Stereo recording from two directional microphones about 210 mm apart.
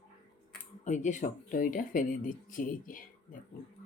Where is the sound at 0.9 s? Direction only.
35° left (ahead or behind).